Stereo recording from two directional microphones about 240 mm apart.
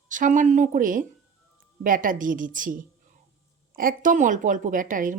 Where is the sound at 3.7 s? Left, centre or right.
Right.